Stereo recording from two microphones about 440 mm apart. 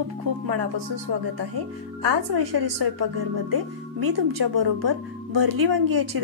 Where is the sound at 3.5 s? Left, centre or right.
Right.